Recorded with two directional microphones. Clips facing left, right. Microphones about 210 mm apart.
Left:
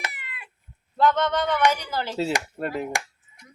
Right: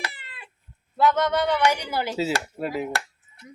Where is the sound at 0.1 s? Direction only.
30° right (ahead or behind).